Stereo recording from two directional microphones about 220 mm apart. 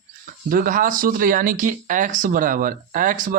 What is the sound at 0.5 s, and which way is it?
Speech, 40° right (ahead or behind).